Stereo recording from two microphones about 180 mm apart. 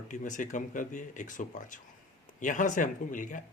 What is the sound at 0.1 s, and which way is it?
Speech, 45° left (ahead or behind).